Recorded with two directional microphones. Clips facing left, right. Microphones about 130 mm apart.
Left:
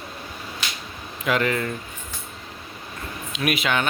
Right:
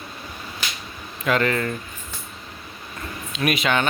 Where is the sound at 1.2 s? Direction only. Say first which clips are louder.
Right 1 dB; 10° left (ahead or behind).